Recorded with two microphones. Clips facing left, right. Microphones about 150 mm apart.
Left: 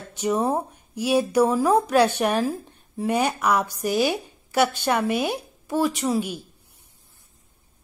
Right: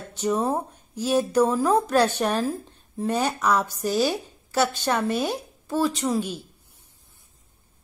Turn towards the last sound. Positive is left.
turn(degrees=10)  # may be behind; listen again after turning